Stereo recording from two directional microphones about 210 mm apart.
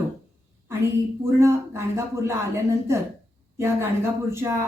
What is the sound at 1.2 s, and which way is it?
A woman's voice, 15° right (ahead or behind).